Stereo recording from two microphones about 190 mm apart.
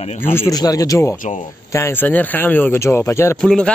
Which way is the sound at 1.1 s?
45° left (ahead or behind).